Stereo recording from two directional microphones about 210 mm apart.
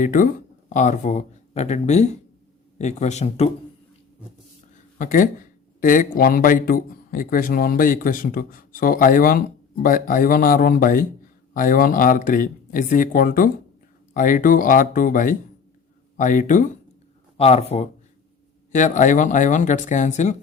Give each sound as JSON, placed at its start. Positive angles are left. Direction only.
{"t": 0.0, "sound": "speech", "side_deg": 40}
{"t": 4.9, "sound": "speech", "side_deg": 40}